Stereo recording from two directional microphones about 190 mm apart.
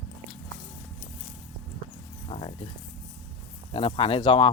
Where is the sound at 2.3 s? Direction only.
30° left (ahead or behind).